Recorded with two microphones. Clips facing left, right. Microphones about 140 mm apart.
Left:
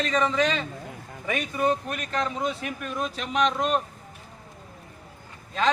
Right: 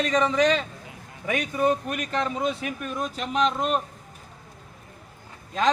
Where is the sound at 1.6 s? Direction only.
10° right (ahead or behind).